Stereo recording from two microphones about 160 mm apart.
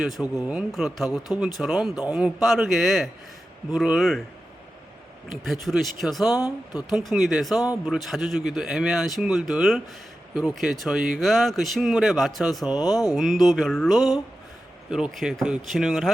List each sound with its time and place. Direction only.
0.0 s speech: centre (ahead or behind)
5.5 s speech: centre (ahead or behind)
6.3 s speech: 25° left (ahead or behind)
6.9 s speech: centre (ahead or behind)
12.7 s speech: 25° left (ahead or behind)
13.1 s speech: centre (ahead or behind)